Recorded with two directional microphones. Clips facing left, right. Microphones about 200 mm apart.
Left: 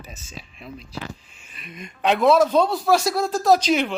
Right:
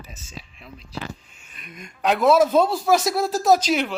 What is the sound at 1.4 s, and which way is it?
Speech, centre (ahead or behind).